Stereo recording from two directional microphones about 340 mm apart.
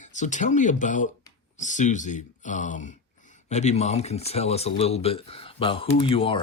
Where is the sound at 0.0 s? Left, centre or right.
Left.